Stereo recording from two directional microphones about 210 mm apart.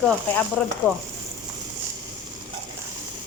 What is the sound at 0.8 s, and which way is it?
Speech, 10° left (ahead or behind).